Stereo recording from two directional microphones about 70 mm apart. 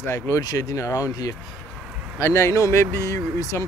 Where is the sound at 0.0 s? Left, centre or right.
Left.